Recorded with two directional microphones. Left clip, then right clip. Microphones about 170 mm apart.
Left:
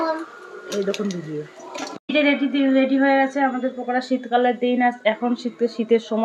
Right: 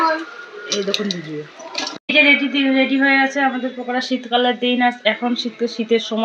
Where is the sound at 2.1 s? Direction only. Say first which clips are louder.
Right 6 dB; 10° left (ahead or behind).